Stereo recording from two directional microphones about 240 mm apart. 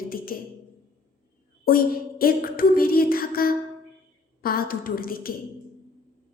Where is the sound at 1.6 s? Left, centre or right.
Left.